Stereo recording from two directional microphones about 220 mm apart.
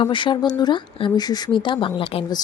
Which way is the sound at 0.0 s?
20° left (ahead or behind).